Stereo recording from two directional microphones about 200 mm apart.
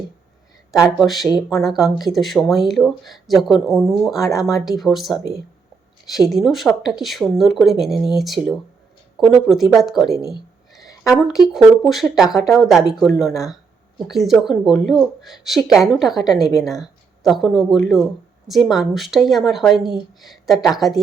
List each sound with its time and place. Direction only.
0.8 s speech: centre (ahead or behind)
4.1 s speech: 15° left (ahead or behind)
4.8 s speech: centre (ahead or behind)
10.3 s a sound: 20° left (ahead or behind)
11.5 s speech: centre (ahead or behind)